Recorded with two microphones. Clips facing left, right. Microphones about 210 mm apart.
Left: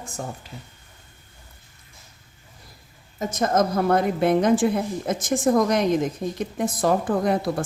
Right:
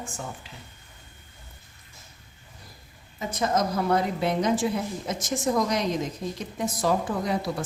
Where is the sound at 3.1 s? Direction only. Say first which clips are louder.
Left 4 dB; 45° left (ahead or behind).